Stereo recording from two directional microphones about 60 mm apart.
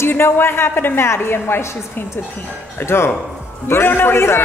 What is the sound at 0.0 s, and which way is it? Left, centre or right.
A man's voice, left.